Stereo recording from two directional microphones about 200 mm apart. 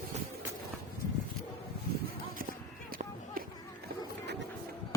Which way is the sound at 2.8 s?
45° right (ahead or behind).